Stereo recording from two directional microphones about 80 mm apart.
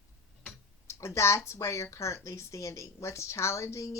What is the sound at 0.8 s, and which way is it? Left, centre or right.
Speech, left.